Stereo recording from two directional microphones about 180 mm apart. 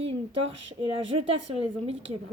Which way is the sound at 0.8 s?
30° right (ahead or behind).